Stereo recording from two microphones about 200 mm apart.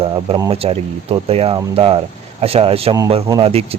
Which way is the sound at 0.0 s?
25° right (ahead or behind).